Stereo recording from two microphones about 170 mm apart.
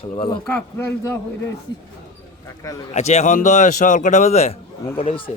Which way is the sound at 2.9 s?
40° left (ahead or behind).